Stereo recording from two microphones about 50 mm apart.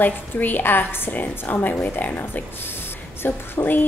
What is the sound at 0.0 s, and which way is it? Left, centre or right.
A woman's voice, left.